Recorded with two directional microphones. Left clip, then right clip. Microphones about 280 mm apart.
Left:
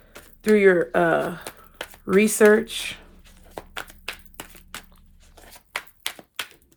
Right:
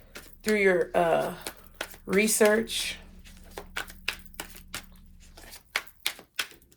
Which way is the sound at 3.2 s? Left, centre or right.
Centre.